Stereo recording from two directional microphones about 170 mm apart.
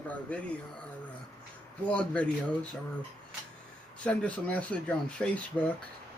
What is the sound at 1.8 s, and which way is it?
Speech, 5° left (ahead or behind).